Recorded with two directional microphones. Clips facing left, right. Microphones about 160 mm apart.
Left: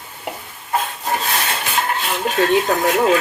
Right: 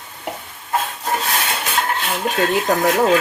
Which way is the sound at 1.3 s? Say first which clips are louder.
Even; centre (ahead or behind).